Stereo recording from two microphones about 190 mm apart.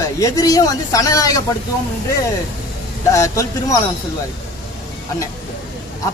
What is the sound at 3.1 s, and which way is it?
Speech, 15° left (ahead or behind).